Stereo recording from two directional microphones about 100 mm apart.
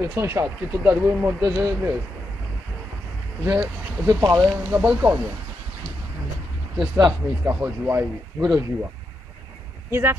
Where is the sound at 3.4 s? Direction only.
20° right (ahead or behind).